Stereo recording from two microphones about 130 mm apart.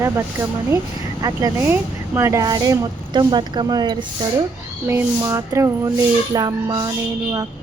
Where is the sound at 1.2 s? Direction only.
25° right (ahead or behind).